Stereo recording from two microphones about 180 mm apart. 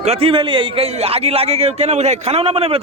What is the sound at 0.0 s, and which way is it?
A man's voice, 35° right (ahead or behind).